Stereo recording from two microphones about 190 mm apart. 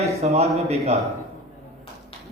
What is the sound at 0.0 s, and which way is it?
Speech, 35° right (ahead or behind).